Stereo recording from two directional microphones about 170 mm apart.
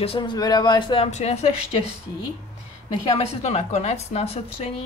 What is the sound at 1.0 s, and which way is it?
Speech, 40° left (ahead or behind).